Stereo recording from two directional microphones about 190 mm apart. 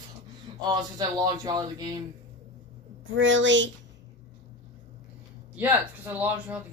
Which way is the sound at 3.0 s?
80° right.